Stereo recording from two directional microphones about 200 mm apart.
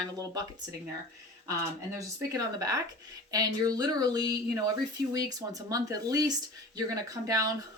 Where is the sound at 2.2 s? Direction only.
15° right (ahead or behind).